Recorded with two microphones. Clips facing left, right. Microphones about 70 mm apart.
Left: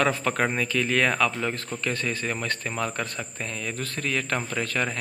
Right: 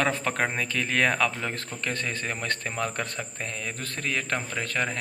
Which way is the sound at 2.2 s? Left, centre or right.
Right.